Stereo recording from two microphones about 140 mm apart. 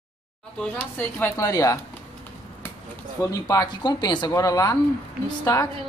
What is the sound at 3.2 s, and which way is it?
Speech, 25° left (ahead or behind).